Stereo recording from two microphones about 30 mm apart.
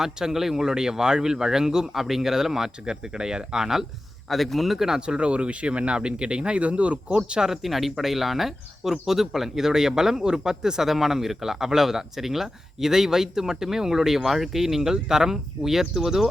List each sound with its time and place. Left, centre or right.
0.0 s a man's voice: centre
4.3 s a man's voice: centre
4.9 s speech: right
6.6 s speech: right
7.2 s a man's voice: right
7.6 s speech: centre; by 10.8 s right
10.8 s speech: centre